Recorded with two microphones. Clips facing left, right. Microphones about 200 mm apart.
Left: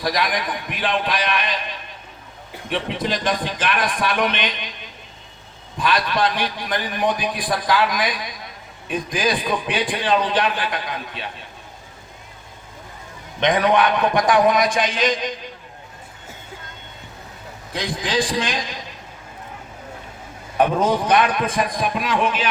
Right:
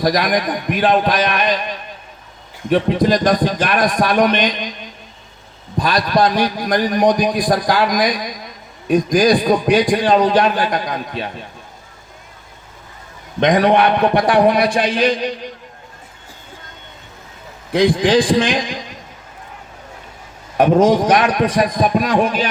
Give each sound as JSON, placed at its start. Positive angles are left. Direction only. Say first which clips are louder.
{"t": 0.0, "sound": "a man's voice", "louder": "right 6 dB", "side_deg": -45}
{"t": 13.4, "sound": "a man's voice", "louder": "right 5 dB", "side_deg": -40}
{"t": 13.7, "sound": "a man's voice", "louder": "right 4 dB", "side_deg": -65}
{"t": 15.0, "sound": "a man's voice", "louder": "right 5 dB", "side_deg": -35}
{"t": 17.7, "sound": "a man's voice", "louder": "right 12 dB", "side_deg": -55}
{"t": 21.1, "sound": "a man's voice", "louder": "right 3 dB", "side_deg": -40}
{"t": 21.4, "sound": "a man's voice", "louder": "right 6 dB", "side_deg": -75}
{"t": 21.8, "sound": "a man's voice", "louder": "right 7 dB", "side_deg": -40}